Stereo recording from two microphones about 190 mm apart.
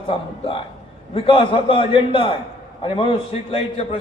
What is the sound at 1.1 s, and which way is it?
A man's voice, 30° left (ahead or behind).